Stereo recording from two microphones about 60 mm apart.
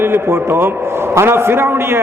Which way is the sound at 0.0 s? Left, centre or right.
Right.